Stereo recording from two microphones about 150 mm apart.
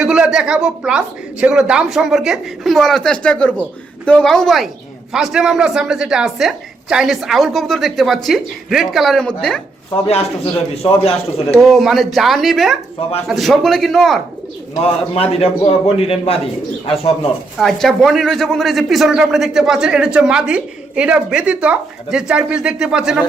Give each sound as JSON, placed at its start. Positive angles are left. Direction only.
{"t": 0.0, "sound": "a man's voice", "side_deg": -5}
{"t": 10.8, "sound": "a man's voice", "side_deg": 40}
{"t": 11.6, "sound": "a man's voice", "side_deg": 0}
{"t": 14.8, "sound": "a man's voice", "side_deg": 40}
{"t": 17.6, "sound": "a man's voice", "side_deg": 0}